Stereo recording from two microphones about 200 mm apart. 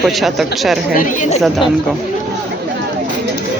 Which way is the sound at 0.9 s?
45° left (ahead or behind).